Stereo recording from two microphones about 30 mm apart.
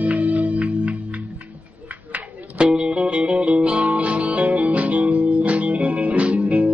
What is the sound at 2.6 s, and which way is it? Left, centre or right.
Music, right.